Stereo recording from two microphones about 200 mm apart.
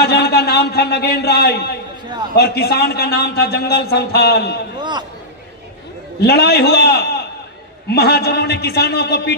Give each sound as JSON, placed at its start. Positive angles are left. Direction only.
{"t": 0.0, "sound": "a man's voice", "side_deg": 55}
{"t": 4.7, "sound": "a sound", "side_deg": -20}
{"t": 6.2, "sound": "a man's voice", "side_deg": 55}